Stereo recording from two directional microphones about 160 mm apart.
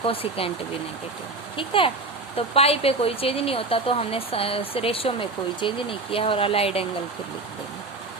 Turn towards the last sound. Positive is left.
turn(degrees=35)  # may be behind; listen again after turning